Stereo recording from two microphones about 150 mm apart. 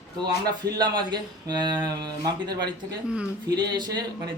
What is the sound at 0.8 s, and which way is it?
Speech, 30° right (ahead or behind).